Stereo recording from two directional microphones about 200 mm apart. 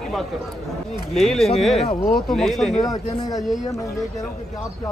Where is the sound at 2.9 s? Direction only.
20° left (ahead or behind).